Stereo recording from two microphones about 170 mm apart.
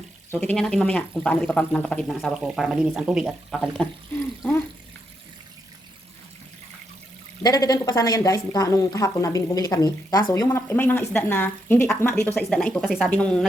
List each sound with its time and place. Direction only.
0.3 s speech: 5° left (ahead or behind)
7.4 s a woman's voice: 20° left (ahead or behind)
12.3 s speech: 5° left (ahead or behind)